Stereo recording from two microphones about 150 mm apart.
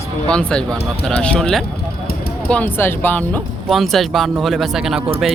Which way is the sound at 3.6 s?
Centre (ahead or behind).